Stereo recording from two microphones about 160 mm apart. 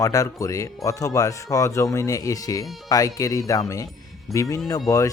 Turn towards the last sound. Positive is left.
turn(degrees=20)  # may be behind; listen again after turning